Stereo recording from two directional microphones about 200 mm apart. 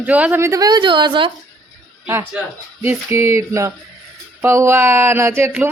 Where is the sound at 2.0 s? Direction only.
10° right (ahead or behind).